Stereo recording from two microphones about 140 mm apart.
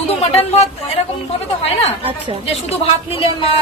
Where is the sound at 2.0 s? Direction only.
40° right (ahead or behind).